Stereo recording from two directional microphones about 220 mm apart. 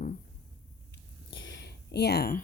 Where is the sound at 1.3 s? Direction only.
55° left (ahead or behind).